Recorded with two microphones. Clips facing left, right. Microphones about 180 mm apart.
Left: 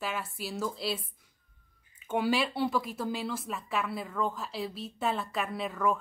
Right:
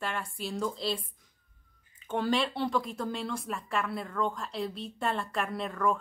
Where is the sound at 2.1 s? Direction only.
5° left (ahead or behind).